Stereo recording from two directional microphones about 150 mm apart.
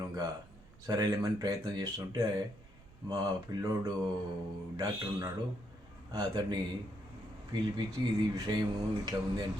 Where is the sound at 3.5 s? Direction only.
25° right (ahead or behind).